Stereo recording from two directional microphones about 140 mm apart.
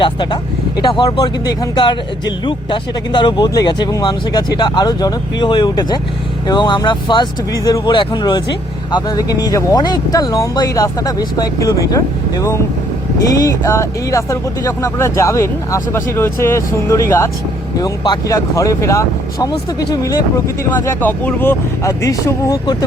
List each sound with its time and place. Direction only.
0.0 s speech: 35° left (ahead or behind)
20.8 s speech: 15° left (ahead or behind); by 22.9 s 30° left (ahead or behind)